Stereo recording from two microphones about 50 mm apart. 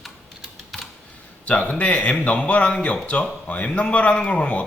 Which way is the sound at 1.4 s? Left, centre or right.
Left.